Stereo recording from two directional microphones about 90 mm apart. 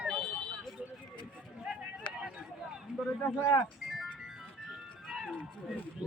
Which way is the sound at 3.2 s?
25° left (ahead or behind).